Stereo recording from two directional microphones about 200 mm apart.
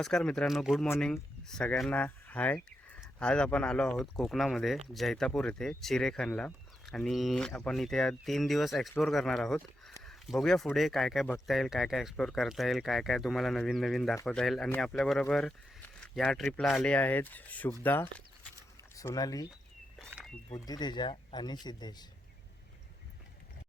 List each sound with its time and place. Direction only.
0.0 s speech: 5° left (ahead or behind)
18.9 s speech: 15° left (ahead or behind)
20.1 s a sound: 5° right (ahead or behind)
20.5 s speech: 20° left (ahead or behind)